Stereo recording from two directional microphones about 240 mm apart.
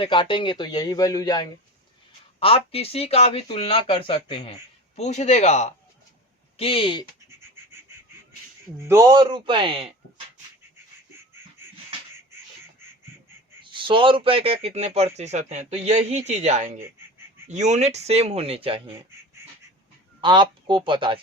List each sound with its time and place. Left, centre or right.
0.0 s speech: left
7.3 s bird: centre
8.9 s a man's voice: centre
13.7 s speech: right
19.4 s duck: centre
20.2 s speech: centre